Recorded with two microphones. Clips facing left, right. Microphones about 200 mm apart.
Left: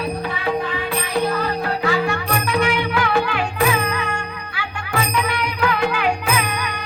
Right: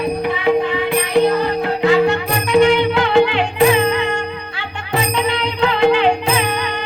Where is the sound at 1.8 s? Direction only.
20° right (ahead or behind).